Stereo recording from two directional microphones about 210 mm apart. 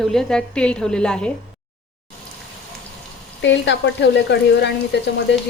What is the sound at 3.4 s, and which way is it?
Speech, 60° left (ahead or behind).